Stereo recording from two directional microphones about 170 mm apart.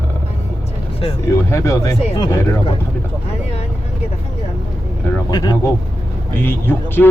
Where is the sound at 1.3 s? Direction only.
15° left (ahead or behind).